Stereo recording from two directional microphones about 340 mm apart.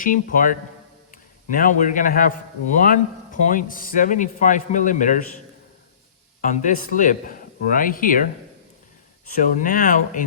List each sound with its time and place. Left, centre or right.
0.0 s a man's voice: left
6.4 s a man's voice: left
9.4 s a man's voice: left